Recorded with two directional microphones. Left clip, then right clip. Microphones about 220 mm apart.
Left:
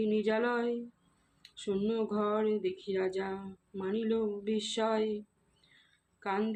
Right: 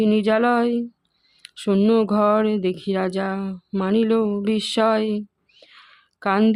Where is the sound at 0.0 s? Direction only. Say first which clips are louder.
Right 12 dB; 50° right (ahead or behind).